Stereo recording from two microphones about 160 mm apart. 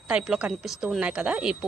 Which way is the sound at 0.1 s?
5° right (ahead or behind).